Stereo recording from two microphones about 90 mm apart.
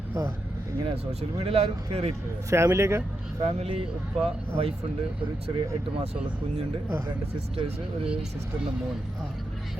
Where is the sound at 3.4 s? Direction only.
90° right.